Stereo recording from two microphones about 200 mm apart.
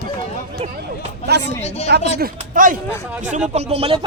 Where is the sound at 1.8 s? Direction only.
55° right (ahead or behind).